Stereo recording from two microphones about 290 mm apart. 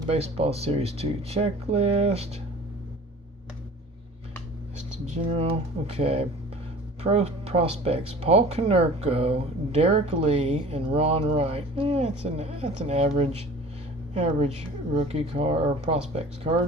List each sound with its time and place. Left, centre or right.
0.1 s speech: right
5.1 s speech: centre